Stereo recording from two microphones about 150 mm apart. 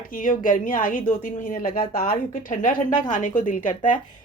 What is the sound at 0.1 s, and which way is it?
A woman's voice, 65° left (ahead or behind).